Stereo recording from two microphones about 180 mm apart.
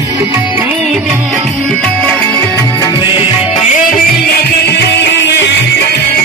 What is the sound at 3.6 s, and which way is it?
Music, 50° left (ahead or behind).